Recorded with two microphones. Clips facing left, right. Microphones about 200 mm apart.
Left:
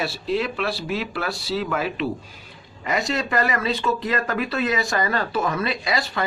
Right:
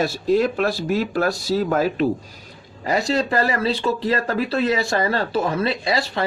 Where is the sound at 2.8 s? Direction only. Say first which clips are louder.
Right 4 dB; 35° right (ahead or behind).